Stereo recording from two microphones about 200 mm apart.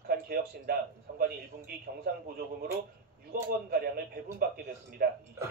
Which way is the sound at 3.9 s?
45° right (ahead or behind).